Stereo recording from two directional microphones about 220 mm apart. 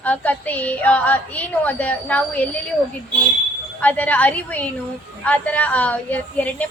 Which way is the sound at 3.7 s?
5° left (ahead or behind).